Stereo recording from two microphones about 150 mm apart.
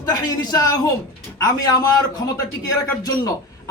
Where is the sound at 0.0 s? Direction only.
25° left (ahead or behind).